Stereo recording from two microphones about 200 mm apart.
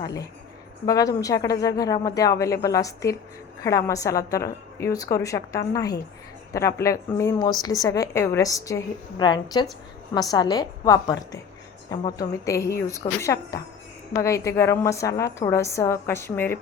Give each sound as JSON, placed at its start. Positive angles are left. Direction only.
{"t": 0.0, "sound": "a woman's voice", "side_deg": 20}